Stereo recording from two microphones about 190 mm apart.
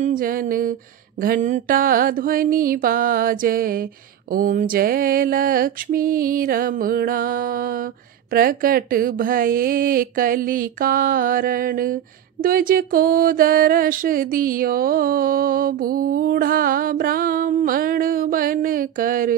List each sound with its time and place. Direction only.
0.0 s mantra: 45° right (ahead or behind)